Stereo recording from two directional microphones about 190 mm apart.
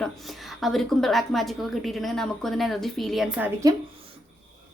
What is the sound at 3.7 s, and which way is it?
Speech, 20° right (ahead or behind).